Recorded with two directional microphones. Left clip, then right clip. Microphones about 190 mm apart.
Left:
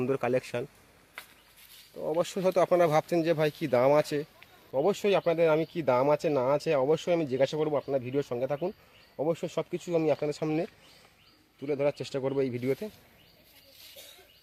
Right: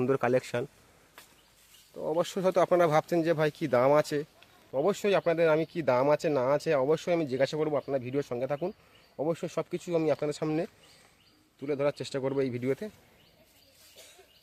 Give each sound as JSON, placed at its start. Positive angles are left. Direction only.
{"t": 0.0, "sound": "speech", "side_deg": -15}
{"t": 2.0, "sound": "speech", "side_deg": -10}